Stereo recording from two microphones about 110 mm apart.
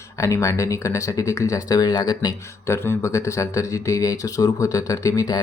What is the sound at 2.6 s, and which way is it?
Speech, 25° left (ahead or behind).